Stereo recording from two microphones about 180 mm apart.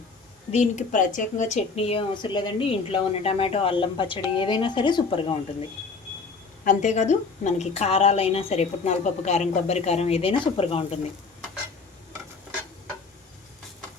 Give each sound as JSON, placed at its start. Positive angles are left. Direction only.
{"t": 0.5, "sound": "speech", "side_deg": 40}
{"t": 6.7, "sound": "speech", "side_deg": 40}